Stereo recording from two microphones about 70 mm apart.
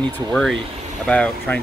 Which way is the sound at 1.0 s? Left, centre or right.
Centre.